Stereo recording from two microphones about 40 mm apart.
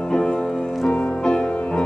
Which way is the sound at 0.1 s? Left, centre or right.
Left.